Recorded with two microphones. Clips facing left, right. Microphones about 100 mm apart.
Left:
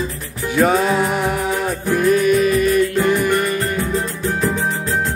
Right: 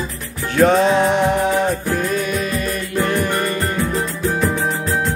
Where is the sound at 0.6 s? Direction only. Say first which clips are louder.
Right 2 dB; 5° left (ahead or behind).